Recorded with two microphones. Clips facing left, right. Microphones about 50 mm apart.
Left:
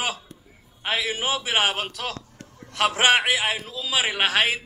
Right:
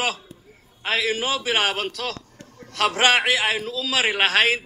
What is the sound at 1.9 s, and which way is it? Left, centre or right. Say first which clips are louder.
A man's voice: right 2 dB; left.